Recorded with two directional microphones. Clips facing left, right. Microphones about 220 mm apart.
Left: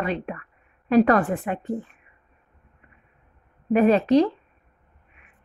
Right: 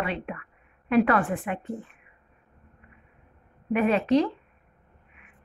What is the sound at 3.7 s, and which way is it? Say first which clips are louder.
Speech: left 5 dB; 35° left (ahead or behind).